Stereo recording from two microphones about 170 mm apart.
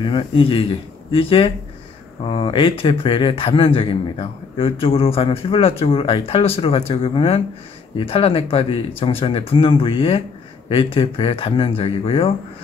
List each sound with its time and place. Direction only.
0.0 s a man's voice: 30° left (ahead or behind)